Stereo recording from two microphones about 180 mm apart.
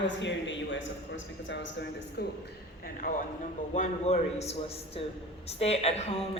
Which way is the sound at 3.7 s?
40° left (ahead or behind).